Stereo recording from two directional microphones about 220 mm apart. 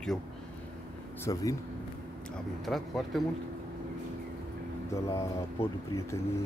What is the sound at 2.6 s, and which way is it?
Speech, centre (ahead or behind).